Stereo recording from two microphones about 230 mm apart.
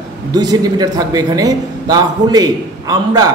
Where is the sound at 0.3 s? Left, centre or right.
Centre.